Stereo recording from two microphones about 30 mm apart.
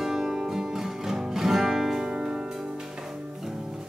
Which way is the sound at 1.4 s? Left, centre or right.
Centre.